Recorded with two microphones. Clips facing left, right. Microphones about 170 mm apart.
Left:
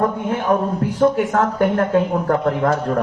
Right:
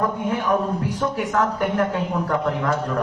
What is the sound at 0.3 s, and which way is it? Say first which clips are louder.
Speech: left 3 dB; 45° left (ahead or behind).